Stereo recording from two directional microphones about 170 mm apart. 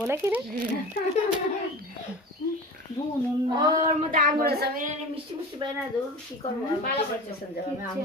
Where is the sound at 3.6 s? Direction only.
20° right (ahead or behind).